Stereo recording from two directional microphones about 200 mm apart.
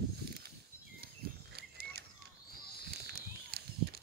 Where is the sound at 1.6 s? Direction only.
55° right (ahead or behind).